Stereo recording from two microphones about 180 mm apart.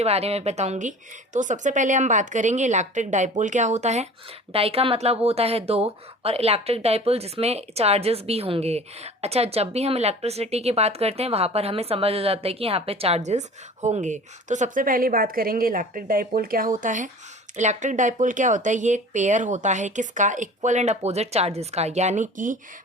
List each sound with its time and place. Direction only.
0.0 s speech: 35° right (ahead or behind)